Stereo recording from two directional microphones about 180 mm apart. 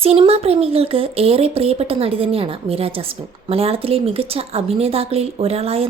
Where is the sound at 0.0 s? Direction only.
35° right (ahead or behind).